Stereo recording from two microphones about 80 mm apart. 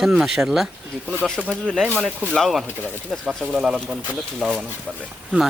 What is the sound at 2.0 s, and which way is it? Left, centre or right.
Speech, centre.